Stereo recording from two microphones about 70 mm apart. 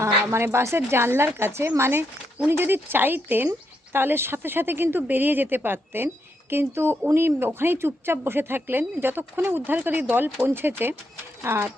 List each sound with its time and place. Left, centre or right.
0.0 s speech: right